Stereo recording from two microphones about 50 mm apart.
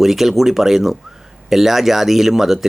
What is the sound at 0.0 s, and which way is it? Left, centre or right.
Speech, centre.